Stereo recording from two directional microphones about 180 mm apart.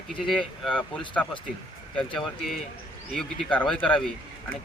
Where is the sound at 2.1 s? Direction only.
Centre (ahead or behind).